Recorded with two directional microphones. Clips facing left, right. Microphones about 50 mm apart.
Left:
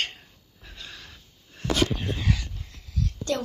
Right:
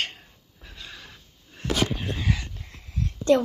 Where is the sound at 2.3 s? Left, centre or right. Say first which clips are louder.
Even; right.